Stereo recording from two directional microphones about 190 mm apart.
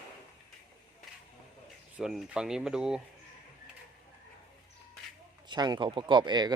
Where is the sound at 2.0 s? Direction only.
Centre (ahead or behind).